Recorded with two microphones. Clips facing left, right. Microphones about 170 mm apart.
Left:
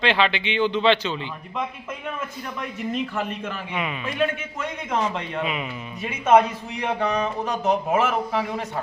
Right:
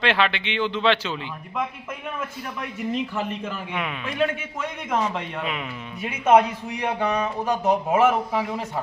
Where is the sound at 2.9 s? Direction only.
15° right (ahead or behind).